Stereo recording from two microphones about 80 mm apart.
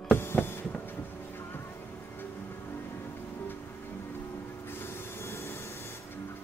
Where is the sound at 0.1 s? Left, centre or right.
Left.